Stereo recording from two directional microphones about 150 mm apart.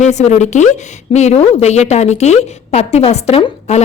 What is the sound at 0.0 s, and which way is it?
A woman's voice, 50° left (ahead or behind).